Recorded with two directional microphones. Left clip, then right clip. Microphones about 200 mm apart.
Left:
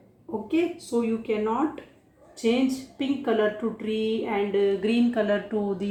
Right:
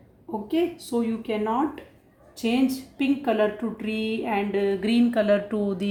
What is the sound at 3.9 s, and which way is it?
A woman's voice, 50° right (ahead or behind).